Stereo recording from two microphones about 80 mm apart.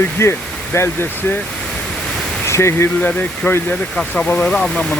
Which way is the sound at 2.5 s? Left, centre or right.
Left.